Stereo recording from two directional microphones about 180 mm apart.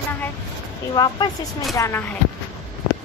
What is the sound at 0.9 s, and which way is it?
Speech, 25° left (ahead or behind).